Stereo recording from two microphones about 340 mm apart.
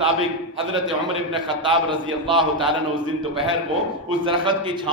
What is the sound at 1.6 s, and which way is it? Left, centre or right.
A man's voice, centre.